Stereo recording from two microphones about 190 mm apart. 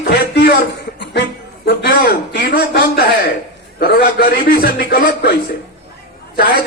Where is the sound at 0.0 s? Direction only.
55° left (ahead or behind).